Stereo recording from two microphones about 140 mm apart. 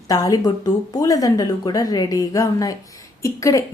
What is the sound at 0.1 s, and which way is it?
Speech, 25° left (ahead or behind).